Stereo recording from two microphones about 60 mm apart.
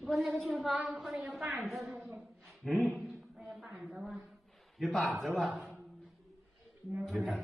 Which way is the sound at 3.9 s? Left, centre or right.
Centre.